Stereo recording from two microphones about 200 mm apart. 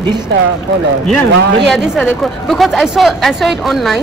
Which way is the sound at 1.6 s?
Centre (ahead or behind).